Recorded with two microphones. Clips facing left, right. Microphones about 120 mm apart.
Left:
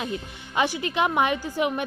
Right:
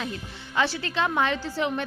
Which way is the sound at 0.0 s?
15° left (ahead or behind).